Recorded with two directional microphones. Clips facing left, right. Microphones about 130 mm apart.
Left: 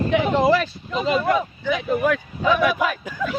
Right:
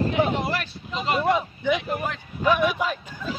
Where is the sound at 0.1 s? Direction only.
90° left.